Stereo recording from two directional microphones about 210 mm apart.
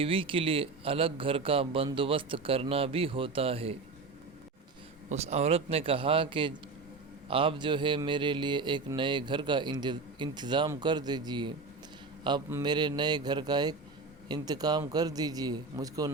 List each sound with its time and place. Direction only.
0.0 s mantra: 25° right (ahead or behind)
5.0 s mantra: 30° right (ahead or behind)